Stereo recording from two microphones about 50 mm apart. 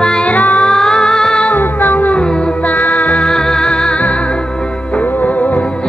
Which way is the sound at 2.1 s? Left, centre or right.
Centre.